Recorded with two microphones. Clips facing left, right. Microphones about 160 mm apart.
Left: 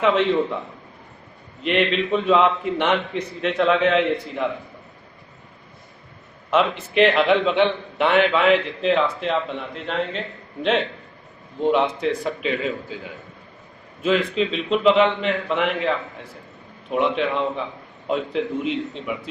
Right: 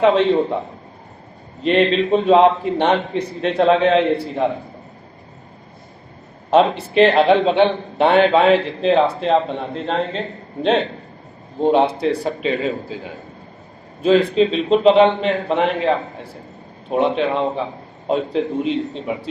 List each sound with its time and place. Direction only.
0.0 s a man's voice: 35° right (ahead or behind)
1.6 s a man's voice: 35° right (ahead or behind)
6.5 s a man's voice: 35° right (ahead or behind)